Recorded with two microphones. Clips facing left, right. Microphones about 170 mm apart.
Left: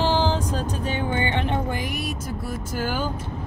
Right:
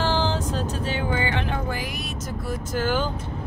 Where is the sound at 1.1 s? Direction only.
25° left (ahead or behind).